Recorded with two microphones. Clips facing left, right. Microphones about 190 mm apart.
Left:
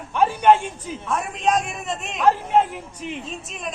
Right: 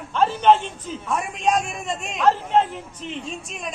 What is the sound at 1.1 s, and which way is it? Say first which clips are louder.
A woman's voice: even; centre (ahead or behind).